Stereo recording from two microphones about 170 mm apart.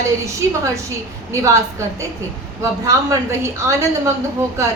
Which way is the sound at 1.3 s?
20° right (ahead or behind).